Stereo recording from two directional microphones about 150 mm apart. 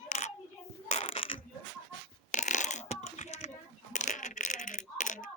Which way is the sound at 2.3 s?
55° left (ahead or behind).